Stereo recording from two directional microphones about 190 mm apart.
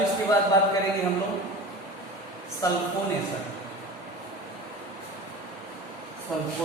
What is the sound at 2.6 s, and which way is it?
Speech, 15° left (ahead or behind).